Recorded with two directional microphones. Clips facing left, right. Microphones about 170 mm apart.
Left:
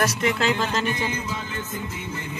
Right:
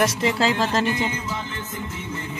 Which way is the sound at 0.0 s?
30° right (ahead or behind).